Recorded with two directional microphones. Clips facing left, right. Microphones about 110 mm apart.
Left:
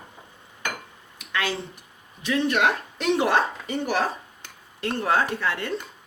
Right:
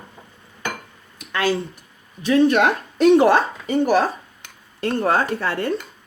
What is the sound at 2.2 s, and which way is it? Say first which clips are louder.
Speech: right 7 dB; 40° right (ahead or behind).